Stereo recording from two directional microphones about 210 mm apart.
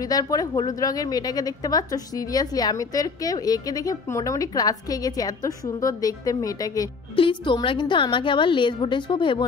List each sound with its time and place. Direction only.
0.0 s a woman's voice: 15° left (ahead or behind)